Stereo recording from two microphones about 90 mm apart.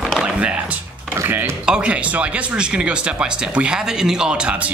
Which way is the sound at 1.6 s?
10° right (ahead or behind).